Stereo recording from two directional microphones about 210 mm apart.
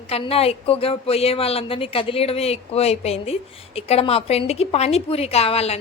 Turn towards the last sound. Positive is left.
turn(degrees=30)  # may be behind; listen again after turning